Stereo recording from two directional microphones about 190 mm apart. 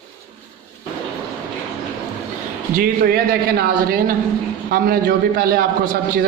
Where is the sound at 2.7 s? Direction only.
50° right (ahead or behind).